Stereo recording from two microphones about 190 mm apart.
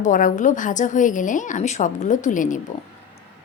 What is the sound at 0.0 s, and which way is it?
A woman's voice, 45° left (ahead or behind).